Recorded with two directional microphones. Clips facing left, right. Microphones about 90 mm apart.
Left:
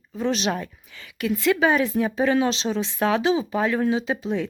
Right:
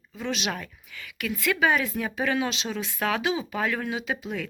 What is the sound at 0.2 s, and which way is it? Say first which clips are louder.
Speech: left 6 dB; 35° left (ahead or behind).